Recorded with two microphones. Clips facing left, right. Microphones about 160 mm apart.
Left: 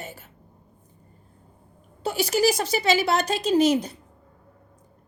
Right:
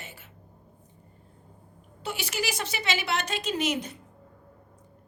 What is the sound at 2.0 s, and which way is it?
A woman's voice, 40° left (ahead or behind).